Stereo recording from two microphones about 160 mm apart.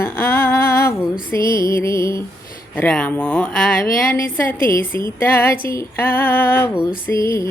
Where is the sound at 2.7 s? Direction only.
10° left (ahead or behind).